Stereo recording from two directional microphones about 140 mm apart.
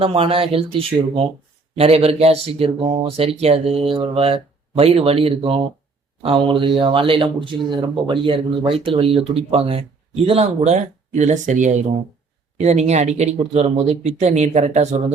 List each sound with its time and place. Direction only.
0.0 s speech: 40° right (ahead or behind)